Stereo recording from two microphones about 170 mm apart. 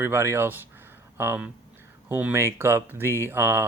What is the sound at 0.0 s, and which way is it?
Speech, 15° right (ahead or behind).